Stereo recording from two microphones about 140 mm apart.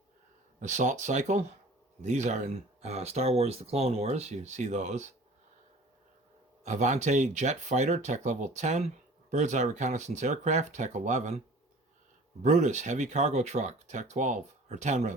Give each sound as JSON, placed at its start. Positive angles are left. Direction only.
{"t": 0.6, "sound": "speech", "side_deg": -60}
{"t": 6.7, "sound": "speech", "side_deg": -60}